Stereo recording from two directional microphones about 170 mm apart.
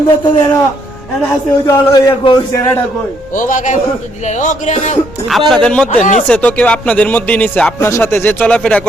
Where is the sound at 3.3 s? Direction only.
50° left (ahead or behind).